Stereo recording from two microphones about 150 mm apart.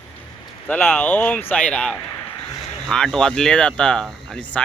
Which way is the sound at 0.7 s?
10° left (ahead or behind).